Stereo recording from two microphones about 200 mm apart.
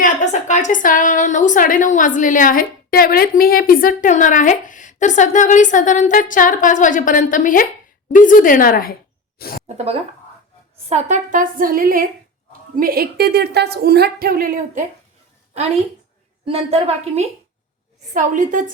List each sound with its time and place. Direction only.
0.0 s a woman's voice: 40° left (ahead or behind)
9.6 s a woman's voice: 30° right (ahead or behind)
16.5 s a woman's voice: 30° right (ahead or behind)